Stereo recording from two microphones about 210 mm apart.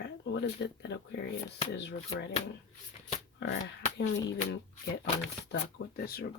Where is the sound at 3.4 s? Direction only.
55° left (ahead or behind).